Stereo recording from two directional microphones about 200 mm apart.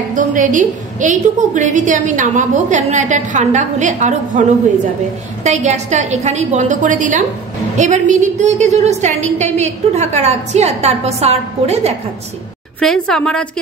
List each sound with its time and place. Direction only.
0.1 s a woman's voice: 40° right (ahead or behind)
5.4 s a woman's voice: 35° right (ahead or behind)
12.8 s a woman's voice: 5° left (ahead or behind)